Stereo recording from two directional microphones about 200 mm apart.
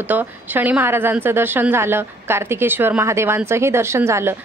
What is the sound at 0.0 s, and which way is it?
A woman's voice, 10° right (ahead or behind).